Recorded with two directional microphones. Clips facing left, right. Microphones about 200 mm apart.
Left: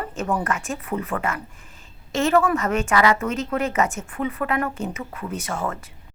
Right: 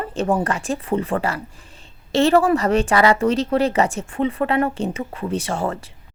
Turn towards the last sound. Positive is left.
turn(degrees=-30)  # may be behind; listen again after turning